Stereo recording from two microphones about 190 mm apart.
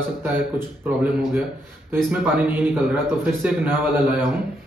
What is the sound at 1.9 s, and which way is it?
A man's voice, 10° right (ahead or behind).